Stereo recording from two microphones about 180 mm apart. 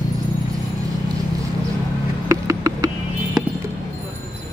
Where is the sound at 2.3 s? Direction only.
20° right (ahead or behind).